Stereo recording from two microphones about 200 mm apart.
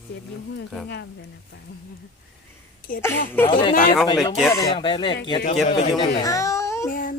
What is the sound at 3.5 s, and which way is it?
Speech, 25° left (ahead or behind).